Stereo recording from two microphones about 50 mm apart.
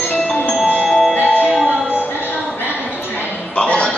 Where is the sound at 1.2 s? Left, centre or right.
Left.